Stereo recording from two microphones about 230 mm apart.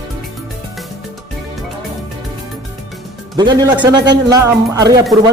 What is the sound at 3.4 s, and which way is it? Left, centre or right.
A man's voice, centre.